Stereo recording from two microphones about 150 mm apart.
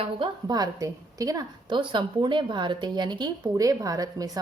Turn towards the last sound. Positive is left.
turn(degrees=-25)  # may be behind; listen again after turning